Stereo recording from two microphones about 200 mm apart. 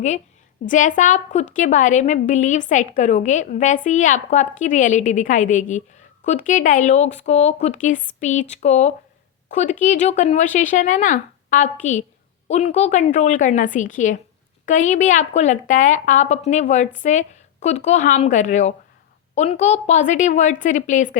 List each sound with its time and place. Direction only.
0.6 s a woman's voice: 40° left (ahead or behind)